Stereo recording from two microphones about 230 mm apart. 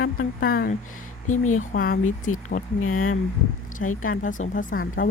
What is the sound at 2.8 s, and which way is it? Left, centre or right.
Speech, left.